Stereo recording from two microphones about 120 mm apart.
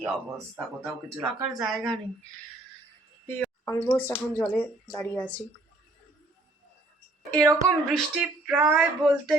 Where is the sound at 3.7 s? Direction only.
25° left (ahead or behind).